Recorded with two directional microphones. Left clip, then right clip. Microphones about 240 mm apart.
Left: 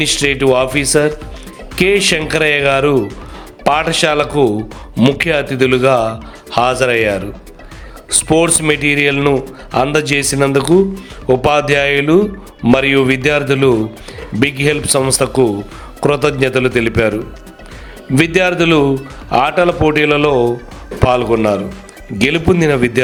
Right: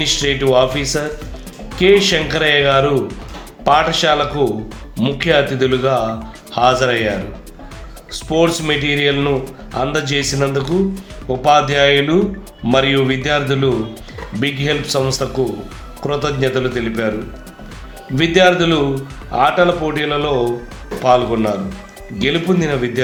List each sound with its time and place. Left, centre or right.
0.0 s speech: left
18.3 s speech: left